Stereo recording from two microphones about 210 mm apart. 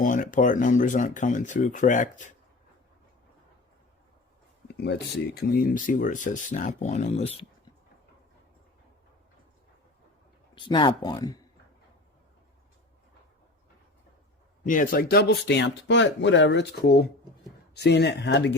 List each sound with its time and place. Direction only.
0.0 s speech: 40° left (ahead or behind)
4.8 s speech: 50° left (ahead or behind); by 7.4 s 30° left (ahead or behind)
10.5 s speech: 25° left (ahead or behind)
14.6 s speech: 40° left (ahead or behind); by 18.5 s 55° left (ahead or behind)